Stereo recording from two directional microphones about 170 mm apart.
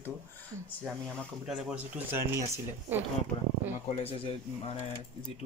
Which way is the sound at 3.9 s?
35° left (ahead or behind).